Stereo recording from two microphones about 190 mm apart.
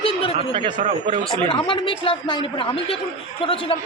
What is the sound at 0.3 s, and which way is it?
Speech, 30° right (ahead or behind).